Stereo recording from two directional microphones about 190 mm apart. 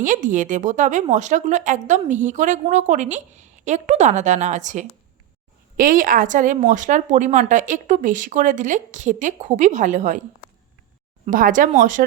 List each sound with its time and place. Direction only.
0.0 s speech: 45° right (ahead or behind)
11.3 s speech: 45° right (ahead or behind)